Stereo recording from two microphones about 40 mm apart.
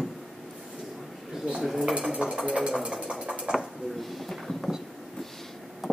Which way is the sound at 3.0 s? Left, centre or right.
Right.